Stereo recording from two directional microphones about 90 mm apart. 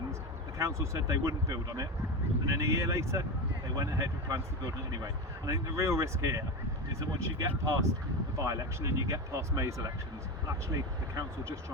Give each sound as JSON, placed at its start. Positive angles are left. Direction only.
{"t": 0.6, "sound": "speech", "side_deg": -35}